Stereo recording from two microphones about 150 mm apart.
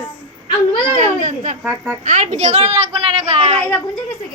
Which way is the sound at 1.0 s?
55° right (ahead or behind).